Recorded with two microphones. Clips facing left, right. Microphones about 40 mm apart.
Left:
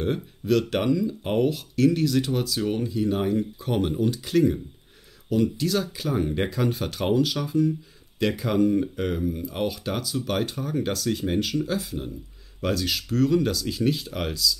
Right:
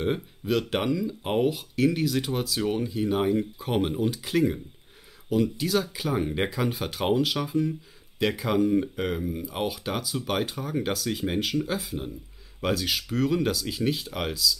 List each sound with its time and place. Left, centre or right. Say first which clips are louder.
0.0 s speech: left 1 dB; centre